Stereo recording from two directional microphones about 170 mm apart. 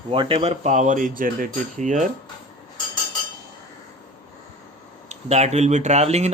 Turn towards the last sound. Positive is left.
turn(degrees=-40)  # may be behind; listen again after turning